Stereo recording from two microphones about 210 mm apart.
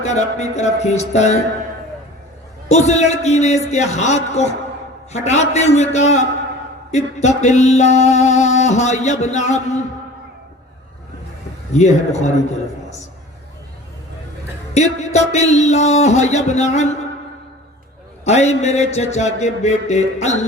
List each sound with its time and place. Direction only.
0.0 s music: 35° left (ahead or behind)
2.6 s music: 30° left (ahead or behind)
11.7 s music: 35° left (ahead or behind)
14.7 s music: 30° left (ahead or behind)
18.3 s music: 30° left (ahead or behind)